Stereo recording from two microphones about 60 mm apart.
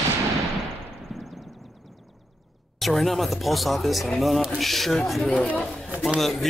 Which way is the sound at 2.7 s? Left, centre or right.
Centre.